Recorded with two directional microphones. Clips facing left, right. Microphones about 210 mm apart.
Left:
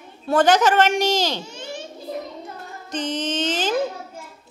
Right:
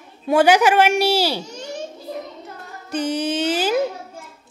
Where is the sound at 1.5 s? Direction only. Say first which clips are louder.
Right 3 dB; 40° right (ahead or behind).